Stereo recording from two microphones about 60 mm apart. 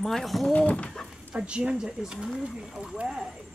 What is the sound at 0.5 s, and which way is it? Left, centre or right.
Speech, left.